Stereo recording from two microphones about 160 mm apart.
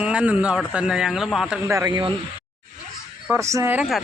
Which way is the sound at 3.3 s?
20° right (ahead or behind).